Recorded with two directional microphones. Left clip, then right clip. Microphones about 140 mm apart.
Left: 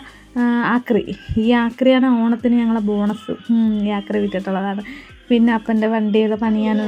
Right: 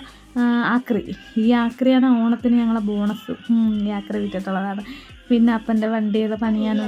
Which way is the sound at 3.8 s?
20° left (ahead or behind).